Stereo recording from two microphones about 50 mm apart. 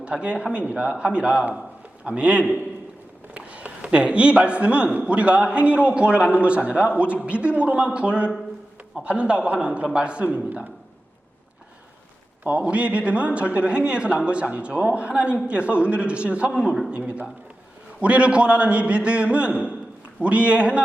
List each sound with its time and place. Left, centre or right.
0.0 s a man's voice: right
3.3 s a sound: right
3.9 s a man's voice: right
12.5 s a man's voice: right
18.0 s a man's voice: right